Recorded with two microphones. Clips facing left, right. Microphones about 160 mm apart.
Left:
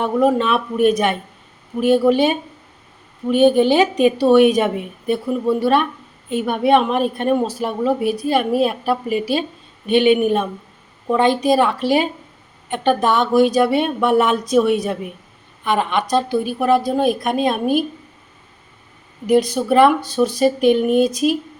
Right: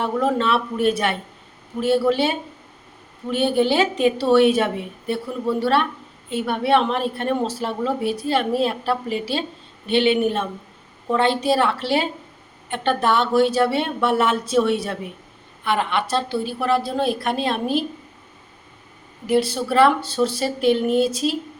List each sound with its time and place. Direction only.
0.0 s a woman's voice: 15° left (ahead or behind)
19.3 s a woman's voice: 15° left (ahead or behind)